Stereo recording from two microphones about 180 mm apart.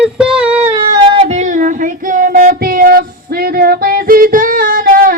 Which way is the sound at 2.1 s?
50° right (ahead or behind).